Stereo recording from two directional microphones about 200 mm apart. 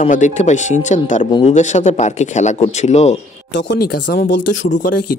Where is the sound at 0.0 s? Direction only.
35° left (ahead or behind).